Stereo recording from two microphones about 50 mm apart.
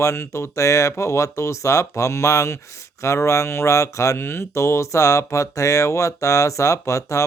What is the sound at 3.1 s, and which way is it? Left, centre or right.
Speech, left.